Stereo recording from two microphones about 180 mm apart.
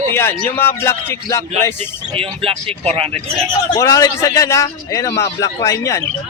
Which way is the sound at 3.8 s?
20° left (ahead or behind).